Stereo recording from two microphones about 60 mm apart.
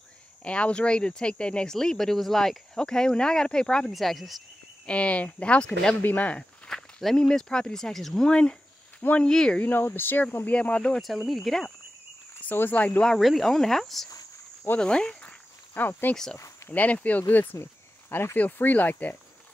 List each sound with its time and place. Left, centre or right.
0.4 s speech: centre
3.9 s speech: centre
4.8 s speech: left
6.7 s walk: centre
7.2 s speech: centre
8.3 s speech: centre
9.6 s speech: left
10.4 s speech: left
11.2 s speech: centre
12.4 s speech: left
13.2 s speech: centre
14.8 s speech: centre
15.2 s walk: left
16.7 s speech: left